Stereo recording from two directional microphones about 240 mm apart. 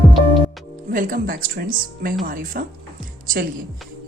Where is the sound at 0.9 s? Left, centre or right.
Right.